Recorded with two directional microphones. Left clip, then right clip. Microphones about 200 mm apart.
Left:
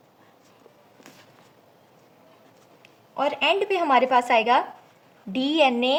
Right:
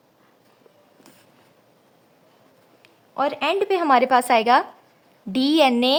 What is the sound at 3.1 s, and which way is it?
Speech, 55° right (ahead or behind).